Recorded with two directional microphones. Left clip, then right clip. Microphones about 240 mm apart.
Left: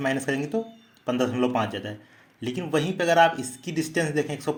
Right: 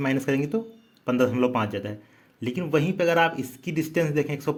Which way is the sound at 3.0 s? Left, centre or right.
Right.